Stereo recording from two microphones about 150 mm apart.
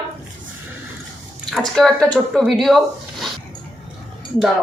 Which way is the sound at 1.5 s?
5° left (ahead or behind).